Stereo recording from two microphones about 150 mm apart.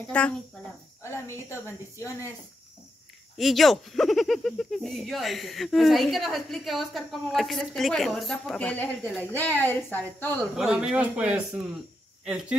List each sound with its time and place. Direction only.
0.1 s a woman's voice: 10° left (ahead or behind)
3.3 s speech: centre (ahead or behind)
10.5 s speech: 5° right (ahead or behind)